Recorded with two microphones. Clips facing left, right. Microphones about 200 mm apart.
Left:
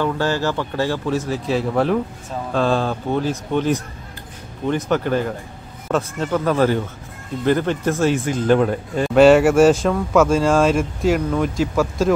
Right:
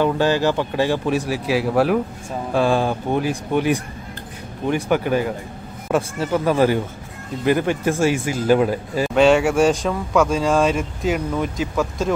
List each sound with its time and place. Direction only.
0.0 s speech: 15° right (ahead or behind); by 12.1 s centre (ahead or behind)